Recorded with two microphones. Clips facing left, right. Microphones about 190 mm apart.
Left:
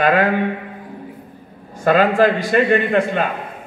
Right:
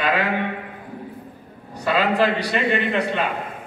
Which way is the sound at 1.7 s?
45° left (ahead or behind).